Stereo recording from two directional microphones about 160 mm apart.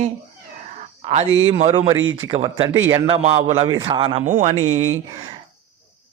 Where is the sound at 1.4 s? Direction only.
40° right (ahead or behind).